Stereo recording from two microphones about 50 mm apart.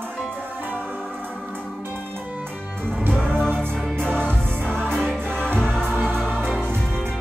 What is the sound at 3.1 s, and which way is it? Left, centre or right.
Music, right.